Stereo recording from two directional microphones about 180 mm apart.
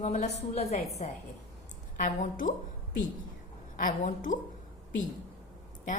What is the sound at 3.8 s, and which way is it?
Speech, 50° left (ahead or behind).